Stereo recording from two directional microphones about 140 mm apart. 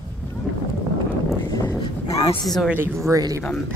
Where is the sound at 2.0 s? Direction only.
40° left (ahead or behind).